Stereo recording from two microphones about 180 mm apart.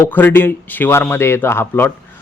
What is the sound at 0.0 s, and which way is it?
Speech, 10° left (ahead or behind).